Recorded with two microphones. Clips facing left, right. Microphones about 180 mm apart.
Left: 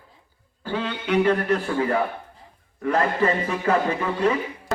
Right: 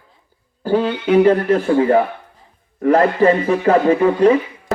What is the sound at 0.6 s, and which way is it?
A man's voice, 40° right (ahead or behind).